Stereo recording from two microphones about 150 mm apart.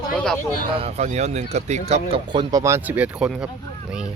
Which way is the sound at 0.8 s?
50° right (ahead or behind).